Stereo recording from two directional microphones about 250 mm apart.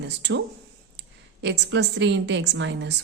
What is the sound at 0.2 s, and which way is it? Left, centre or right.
Speech, right.